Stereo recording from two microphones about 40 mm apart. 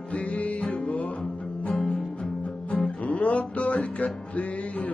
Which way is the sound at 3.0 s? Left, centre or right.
Left.